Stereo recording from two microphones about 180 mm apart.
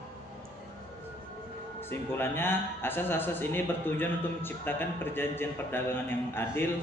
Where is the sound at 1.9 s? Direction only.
10° left (ahead or behind).